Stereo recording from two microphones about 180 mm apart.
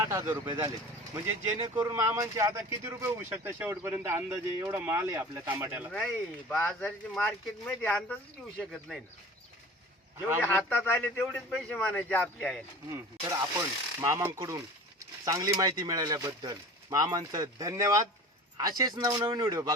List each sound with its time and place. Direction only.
0.0 s speech: 15° right (ahead or behind)
5.9 s speech: 5° left (ahead or behind)
10.2 s speech: 10° right (ahead or behind)
10.4 s a man's voice: 10° left (ahead or behind)
12.9 s speech: 15° right (ahead or behind)